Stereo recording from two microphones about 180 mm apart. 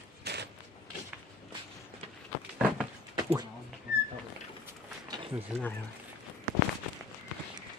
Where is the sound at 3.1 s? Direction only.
25° right (ahead or behind).